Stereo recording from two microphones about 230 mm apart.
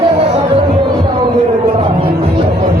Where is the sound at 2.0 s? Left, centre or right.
Right.